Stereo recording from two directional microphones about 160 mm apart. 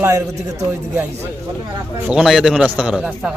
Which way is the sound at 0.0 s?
20° right (ahead or behind).